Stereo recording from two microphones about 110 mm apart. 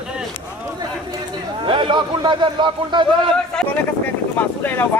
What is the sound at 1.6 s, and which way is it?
A man's voice, 50° right (ahead or behind).